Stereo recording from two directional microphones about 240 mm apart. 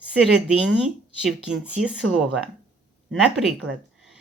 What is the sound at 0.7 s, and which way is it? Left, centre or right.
Speech, centre.